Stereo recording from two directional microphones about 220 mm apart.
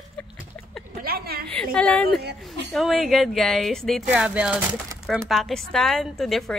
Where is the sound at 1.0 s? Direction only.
45° right (ahead or behind).